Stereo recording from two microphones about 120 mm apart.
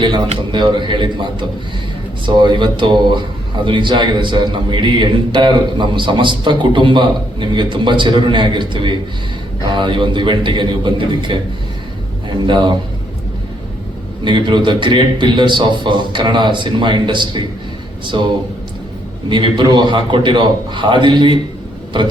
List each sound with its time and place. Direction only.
0.0 s speech: 40° right (ahead or behind)
12.5 s speech: 40° right (ahead or behind)
14.3 s speech: 40° right (ahead or behind)
19.3 s speech: 40° right (ahead or behind)